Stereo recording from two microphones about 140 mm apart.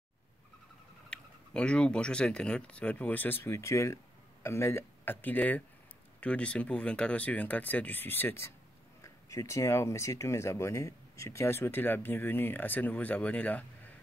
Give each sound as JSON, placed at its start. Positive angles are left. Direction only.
{"t": 1.1, "sound": "speech", "side_deg": 5}